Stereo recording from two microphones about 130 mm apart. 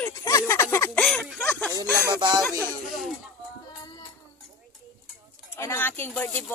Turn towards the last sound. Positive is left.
turn(degrees=15)  # may be behind; listen again after turning